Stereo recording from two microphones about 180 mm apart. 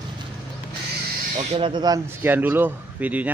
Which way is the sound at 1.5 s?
25° right (ahead or behind).